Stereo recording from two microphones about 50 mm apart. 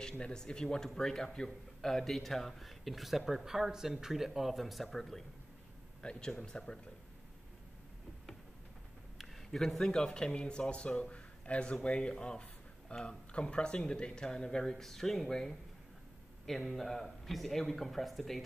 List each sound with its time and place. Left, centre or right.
0.0 s a man's voice: centre
6.0 s speech: centre
9.5 s a man's voice: centre